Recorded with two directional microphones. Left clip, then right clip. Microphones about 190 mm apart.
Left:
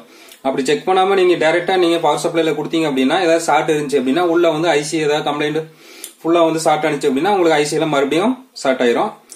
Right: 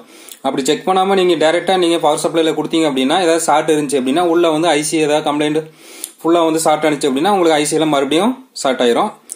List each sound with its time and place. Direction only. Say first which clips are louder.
0.4 s speech: right 1 dB; 35° right (ahead or behind)